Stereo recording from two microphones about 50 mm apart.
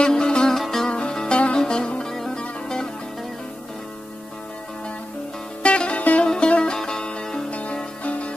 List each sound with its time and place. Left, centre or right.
0.0 s music: centre
5.6 s music: left
6.2 s music: centre